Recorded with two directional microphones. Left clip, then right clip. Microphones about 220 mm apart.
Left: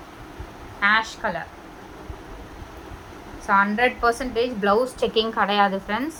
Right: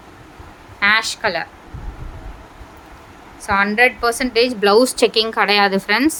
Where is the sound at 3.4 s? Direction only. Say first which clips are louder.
Right 4 dB; 50° right (ahead or behind).